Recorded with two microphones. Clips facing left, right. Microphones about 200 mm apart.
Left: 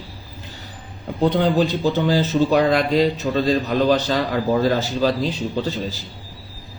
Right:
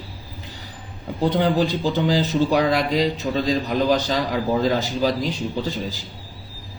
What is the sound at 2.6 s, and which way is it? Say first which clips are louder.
Speech: left 2 dB; 60° left (ahead or behind).